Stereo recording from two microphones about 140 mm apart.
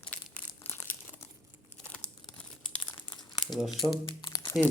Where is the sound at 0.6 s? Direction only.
15° left (ahead or behind).